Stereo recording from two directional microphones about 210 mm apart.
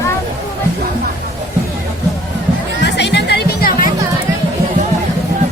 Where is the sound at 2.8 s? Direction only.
55° left (ahead or behind).